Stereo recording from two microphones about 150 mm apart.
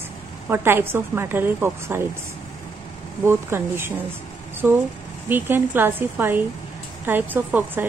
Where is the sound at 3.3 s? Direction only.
15° right (ahead or behind).